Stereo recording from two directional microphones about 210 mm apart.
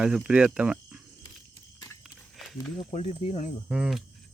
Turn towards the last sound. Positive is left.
turn(degrees=0)  # may be behind; listen again after turning